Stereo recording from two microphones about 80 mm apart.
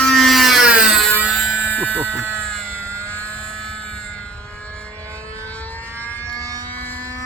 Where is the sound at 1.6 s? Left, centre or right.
Centre.